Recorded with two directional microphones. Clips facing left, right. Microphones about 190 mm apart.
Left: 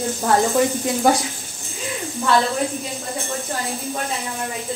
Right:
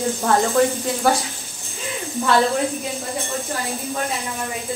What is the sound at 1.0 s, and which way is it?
Speech, 15° left (ahead or behind).